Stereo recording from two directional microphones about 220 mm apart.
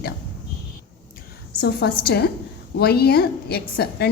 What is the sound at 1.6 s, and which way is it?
A woman's voice, 45° left (ahead or behind).